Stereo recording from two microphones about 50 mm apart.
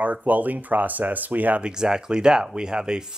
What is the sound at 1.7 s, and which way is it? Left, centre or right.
Speech, centre.